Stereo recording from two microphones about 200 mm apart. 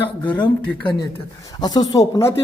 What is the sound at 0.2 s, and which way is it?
Speech, 25° left (ahead or behind).